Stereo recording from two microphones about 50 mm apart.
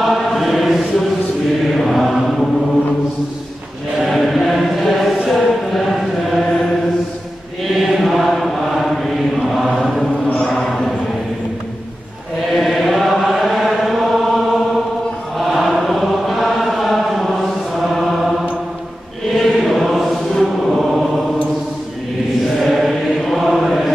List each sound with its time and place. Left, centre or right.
0.0 s chant: centre
4.0 s a sound: centre
5.3 s chant: centre
7.8 s chant: centre
10.4 s a sound: centre
12.5 s chant: centre
19.3 s chant: centre
22.6 s chant: centre